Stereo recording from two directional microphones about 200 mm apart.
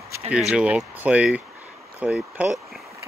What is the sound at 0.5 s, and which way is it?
Speech, 5° right (ahead or behind).